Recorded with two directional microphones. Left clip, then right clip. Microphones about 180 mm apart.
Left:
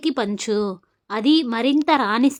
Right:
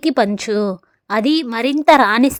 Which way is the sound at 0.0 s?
25° right (ahead or behind).